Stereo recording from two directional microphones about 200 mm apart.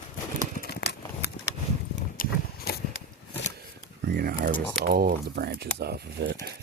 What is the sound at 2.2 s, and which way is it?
Horse, 50° left (ahead or behind).